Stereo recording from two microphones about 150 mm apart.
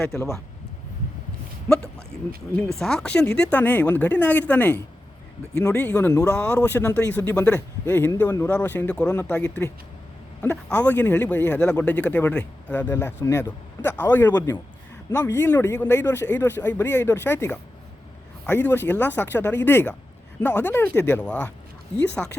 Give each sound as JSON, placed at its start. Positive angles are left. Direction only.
{"t": 0.1, "sound": "speech", "side_deg": 5}
{"t": 2.7, "sound": "speech", "side_deg": 5}